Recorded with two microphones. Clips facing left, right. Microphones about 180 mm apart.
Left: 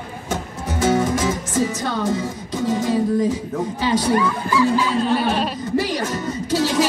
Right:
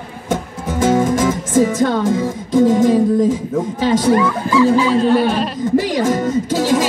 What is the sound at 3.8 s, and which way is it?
Speech, 45° right (ahead or behind).